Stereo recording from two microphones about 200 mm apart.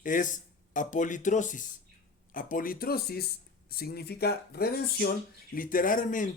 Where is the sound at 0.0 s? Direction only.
40° left (ahead or behind).